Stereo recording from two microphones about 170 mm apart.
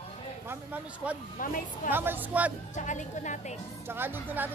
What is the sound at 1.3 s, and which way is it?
Speech, 50° left (ahead or behind).